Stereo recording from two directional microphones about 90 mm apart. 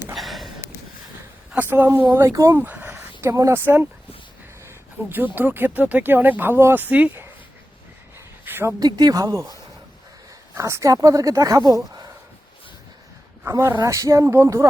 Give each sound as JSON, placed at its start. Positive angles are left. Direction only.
{"t": 0.1, "sound": "a sound", "side_deg": 0}
{"t": 1.5, "sound": "speech", "side_deg": -20}
{"t": 2.3, "sound": "speech", "side_deg": -40}
{"t": 2.6, "sound": "speech", "side_deg": -20}
{"t": 8.4, "sound": "a sound", "side_deg": -25}
{"t": 9.0, "sound": "speech", "side_deg": -45}
{"t": 13.4, "sound": "speech", "side_deg": -35}